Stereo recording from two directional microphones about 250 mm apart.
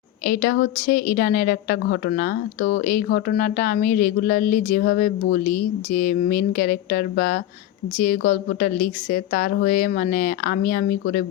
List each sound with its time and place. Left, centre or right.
0.3 s a woman's voice: left